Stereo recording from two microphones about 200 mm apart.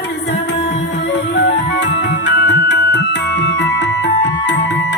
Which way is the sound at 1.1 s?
60° left (ahead or behind).